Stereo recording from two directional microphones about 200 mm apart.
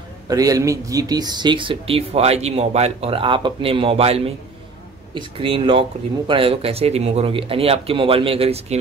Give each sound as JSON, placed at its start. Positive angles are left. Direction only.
{"t": 0.3, "sound": "speech", "side_deg": -15}